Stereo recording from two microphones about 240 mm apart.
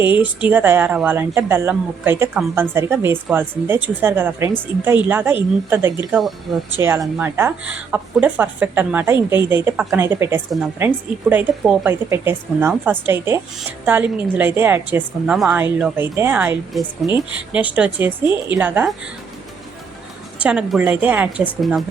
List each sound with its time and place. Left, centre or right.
0.0 s a woman's voice: centre
20.4 s a woman's voice: centre